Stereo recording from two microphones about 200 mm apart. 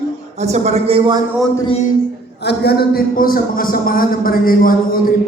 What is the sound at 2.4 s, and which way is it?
Speech, 55° left (ahead or behind).